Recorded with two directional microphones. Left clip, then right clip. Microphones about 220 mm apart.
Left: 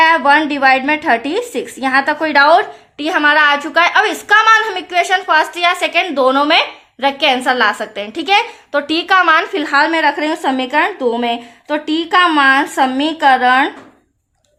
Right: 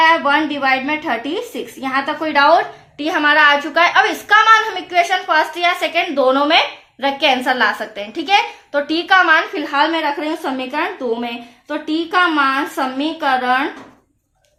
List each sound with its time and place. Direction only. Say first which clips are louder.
0.0 s a woman's voice: left 3 dB; 45° left (ahead or behind)
3.0 s a woman's voice: left 1 dB; 25° left (ahead or behind); by 13.7 s 50° left (ahead or behind)